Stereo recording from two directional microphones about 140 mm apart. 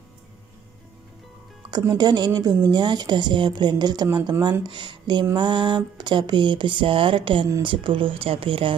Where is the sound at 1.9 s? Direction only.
30° right (ahead or behind).